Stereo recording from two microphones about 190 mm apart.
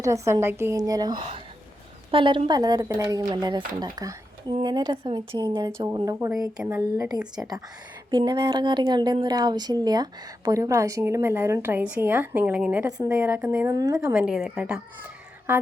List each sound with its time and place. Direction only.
0.0 s a woman's voice: 15° right (ahead or behind)
13.7 s speech: 20° right (ahead or behind)
14.0 s a woman's voice: 5° right (ahead or behind)